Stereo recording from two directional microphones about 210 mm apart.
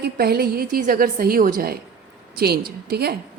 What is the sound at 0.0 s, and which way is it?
A woman's voice, 50° right (ahead or behind).